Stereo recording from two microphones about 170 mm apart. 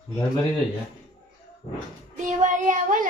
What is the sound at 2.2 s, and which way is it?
Child singing, 50° right (ahead or behind).